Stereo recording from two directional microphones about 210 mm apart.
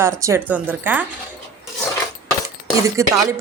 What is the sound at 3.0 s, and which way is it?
Speech, 15° right (ahead or behind).